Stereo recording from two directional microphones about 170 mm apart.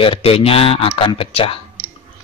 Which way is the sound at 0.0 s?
35° left (ahead or behind).